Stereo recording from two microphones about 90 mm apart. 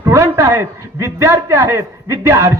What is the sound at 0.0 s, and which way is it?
A man's voice, 35° right (ahead or behind).